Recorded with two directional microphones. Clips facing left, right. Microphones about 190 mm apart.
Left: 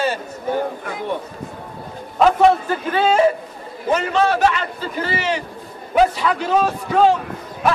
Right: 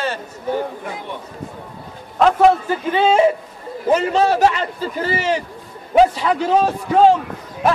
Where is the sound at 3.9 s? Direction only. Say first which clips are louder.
Right 2 dB; 35° right (ahead or behind).